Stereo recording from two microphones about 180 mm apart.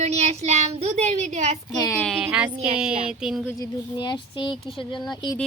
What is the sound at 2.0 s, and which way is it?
Speech, centre (ahead or behind).